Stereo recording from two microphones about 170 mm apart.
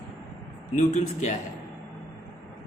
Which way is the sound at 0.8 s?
45° left (ahead or behind).